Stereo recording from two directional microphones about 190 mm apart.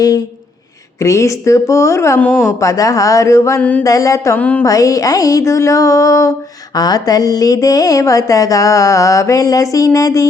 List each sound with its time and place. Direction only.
0.9 s speech: 15° left (ahead or behind)
3.8 s speech: 15° left (ahead or behind)
4.7 s speech: 20° left (ahead or behind)